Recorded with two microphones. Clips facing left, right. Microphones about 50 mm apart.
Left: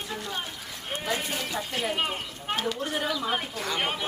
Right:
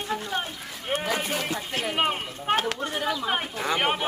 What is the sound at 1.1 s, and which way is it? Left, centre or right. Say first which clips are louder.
Speech: right 3 dB; right.